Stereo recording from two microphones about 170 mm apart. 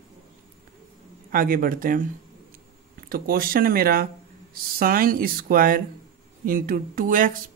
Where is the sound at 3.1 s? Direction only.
60° right (ahead or behind).